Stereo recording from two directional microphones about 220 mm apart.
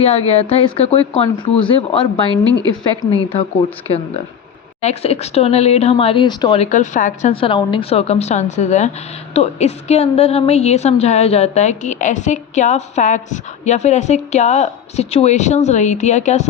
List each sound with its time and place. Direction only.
0.0 s speech: 30° left (ahead or behind)
2.3 s a woman's voice: 20° right (ahead or behind)
3.0 s speech: 25° left (ahead or behind)
4.8 s a woman's voice: 30° left (ahead or behind)